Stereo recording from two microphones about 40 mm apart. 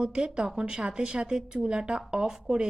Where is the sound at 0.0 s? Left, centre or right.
Right.